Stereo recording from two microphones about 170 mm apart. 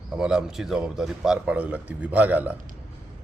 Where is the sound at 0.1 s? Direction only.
5° right (ahead or behind).